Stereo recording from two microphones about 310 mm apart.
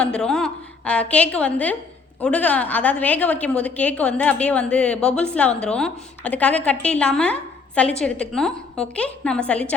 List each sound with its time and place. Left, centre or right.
0.0 s a woman's voice: centre